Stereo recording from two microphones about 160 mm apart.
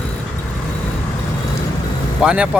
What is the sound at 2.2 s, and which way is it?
Speech, 5° right (ahead or behind).